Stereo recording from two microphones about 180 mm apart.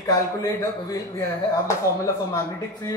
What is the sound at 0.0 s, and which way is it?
Speech, 20° left (ahead or behind).